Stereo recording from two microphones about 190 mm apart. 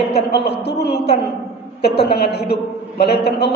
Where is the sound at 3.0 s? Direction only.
60° left (ahead or behind).